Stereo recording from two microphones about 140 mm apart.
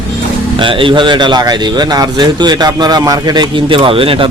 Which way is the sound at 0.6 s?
40° right (ahead or behind).